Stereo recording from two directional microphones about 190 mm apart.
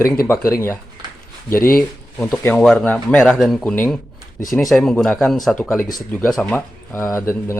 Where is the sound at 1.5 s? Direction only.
50° left (ahead or behind).